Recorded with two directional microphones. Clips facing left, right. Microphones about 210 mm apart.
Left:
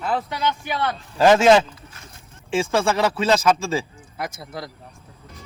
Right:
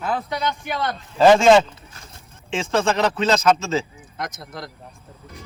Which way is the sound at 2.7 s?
10° left (ahead or behind).